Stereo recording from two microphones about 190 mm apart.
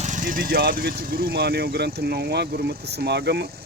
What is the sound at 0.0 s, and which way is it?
Speech, 40° right (ahead or behind).